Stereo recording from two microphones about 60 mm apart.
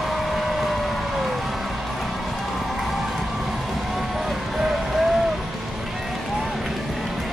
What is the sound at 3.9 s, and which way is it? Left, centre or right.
Music, centre.